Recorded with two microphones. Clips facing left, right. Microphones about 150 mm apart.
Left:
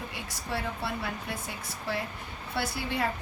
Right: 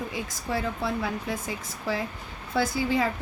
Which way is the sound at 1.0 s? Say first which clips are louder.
Right 5 dB; 90° right.